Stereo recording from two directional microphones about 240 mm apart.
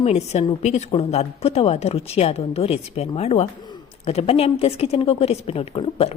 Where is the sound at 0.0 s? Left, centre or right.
Left.